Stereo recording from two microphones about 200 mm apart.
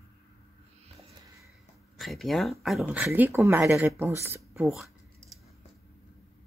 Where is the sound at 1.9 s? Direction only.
Centre (ahead or behind).